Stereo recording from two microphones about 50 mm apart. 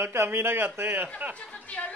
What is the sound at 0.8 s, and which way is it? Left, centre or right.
Speech, right.